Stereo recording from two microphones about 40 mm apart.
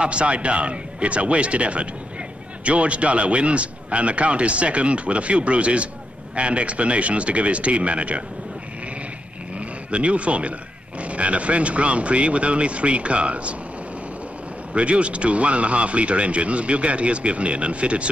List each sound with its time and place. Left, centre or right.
0.0 s speech: right
9.8 s speech: right
14.7 s speech: right